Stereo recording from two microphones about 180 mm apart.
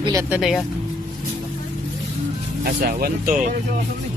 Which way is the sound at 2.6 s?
55° right (ahead or behind).